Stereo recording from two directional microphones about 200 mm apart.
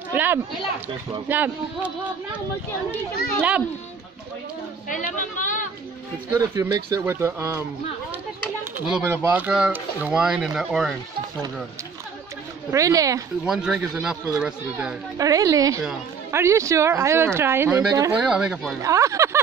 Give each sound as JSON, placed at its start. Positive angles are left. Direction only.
{"t": 0.1, "sound": "speech", "side_deg": -10}
{"t": 4.8, "sound": "a woman's voice", "side_deg": 40}
{"t": 6.3, "sound": "speech", "side_deg": -15}
{"t": 8.9, "sound": "speech", "side_deg": -15}
{"t": 12.7, "sound": "speech", "side_deg": -15}
{"t": 13.5, "sound": "speech", "side_deg": -5}
{"t": 15.1, "sound": "speech", "side_deg": -15}
{"t": 18.8, "sound": "speech", "side_deg": -15}